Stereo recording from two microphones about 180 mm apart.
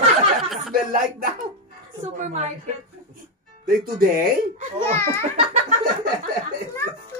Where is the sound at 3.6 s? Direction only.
55° right (ahead or behind).